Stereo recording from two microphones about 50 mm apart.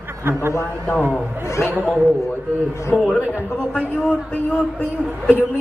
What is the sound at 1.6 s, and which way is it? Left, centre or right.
Speech, left.